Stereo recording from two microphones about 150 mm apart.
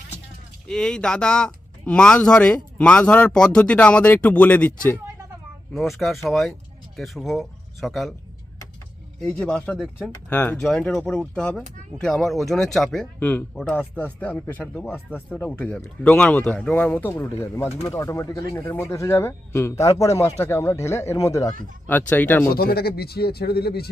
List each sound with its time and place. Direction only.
0.7 s speech: 5° left (ahead or behind)
5.7 s speech: centre (ahead or behind)
9.2 s speech: 5° left (ahead or behind)
10.2 s speech: 10° left (ahead or behind)
22.5 s speech: 90° left